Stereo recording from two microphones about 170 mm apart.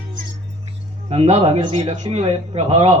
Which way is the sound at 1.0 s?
40° right (ahead or behind).